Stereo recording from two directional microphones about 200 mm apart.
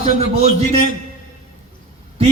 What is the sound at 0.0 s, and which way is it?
Speech, 30° right (ahead or behind).